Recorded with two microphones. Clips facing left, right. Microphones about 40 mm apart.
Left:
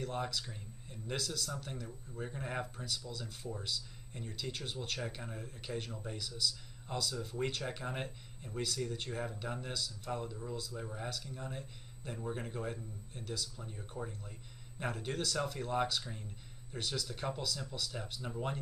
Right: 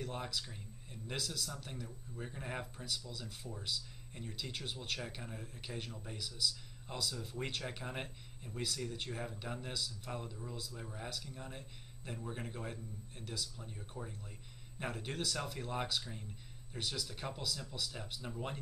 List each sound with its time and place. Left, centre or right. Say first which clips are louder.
0.0 s speech: left 3 dB; centre
10.7 s speech: left 4 dB; centre
11.1 s speech: left 3 dB; centre
14.0 s speech: left 4 dB; left
14.8 s speech: left 3 dB; centre